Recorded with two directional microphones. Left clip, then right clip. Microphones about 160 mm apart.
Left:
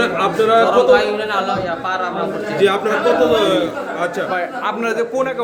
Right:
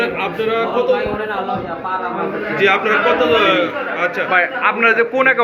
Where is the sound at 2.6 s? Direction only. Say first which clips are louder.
Right 1 dB; 90° left.